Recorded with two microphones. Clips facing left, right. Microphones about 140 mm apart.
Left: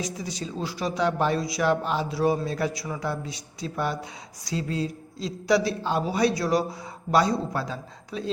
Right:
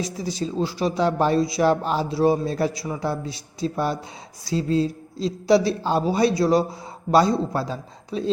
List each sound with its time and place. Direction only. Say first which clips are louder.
0.0 s a man's voice: right 5 dB; 30° right (ahead or behind)